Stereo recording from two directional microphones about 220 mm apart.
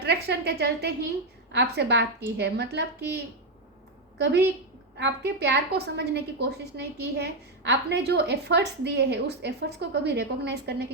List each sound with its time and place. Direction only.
0.0 s a woman's voice: 50° right (ahead or behind)
4.9 s a woman's voice: 50° right (ahead or behind)